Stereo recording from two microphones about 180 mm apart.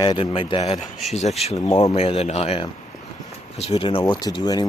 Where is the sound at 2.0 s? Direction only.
35° left (ahead or behind).